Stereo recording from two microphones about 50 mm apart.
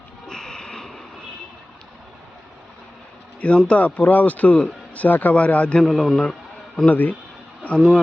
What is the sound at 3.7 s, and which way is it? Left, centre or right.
Speech, left.